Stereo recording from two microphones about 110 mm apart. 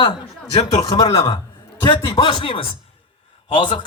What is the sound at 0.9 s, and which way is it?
A man's voice, 40° left (ahead or behind).